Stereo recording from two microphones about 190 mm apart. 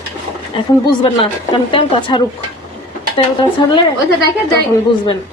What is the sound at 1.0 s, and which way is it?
A woman's voice, 30° left (ahead or behind).